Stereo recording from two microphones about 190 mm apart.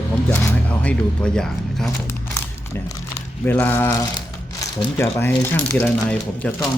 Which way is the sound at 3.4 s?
10° left (ahead or behind).